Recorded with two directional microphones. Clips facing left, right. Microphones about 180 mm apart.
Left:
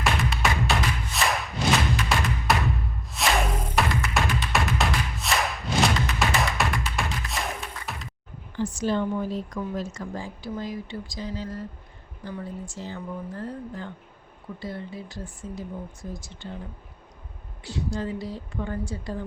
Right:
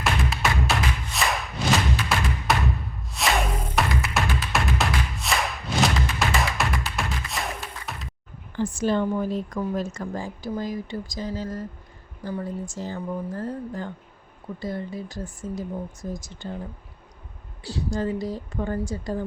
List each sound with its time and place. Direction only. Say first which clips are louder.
0.0 s music: even; centre (ahead or behind)
8.5 s speech: right 2 dB; 50° right (ahead or behind)
17.6 s speech: right 3 dB; 35° right (ahead or behind)